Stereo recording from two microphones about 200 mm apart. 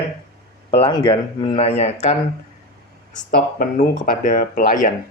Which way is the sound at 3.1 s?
40° left (ahead or behind).